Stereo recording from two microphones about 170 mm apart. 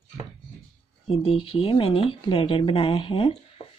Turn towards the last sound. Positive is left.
turn(degrees=30)  # may be behind; listen again after turning